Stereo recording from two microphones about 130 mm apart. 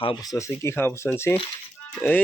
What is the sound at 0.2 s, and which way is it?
Speech, 25° left (ahead or behind).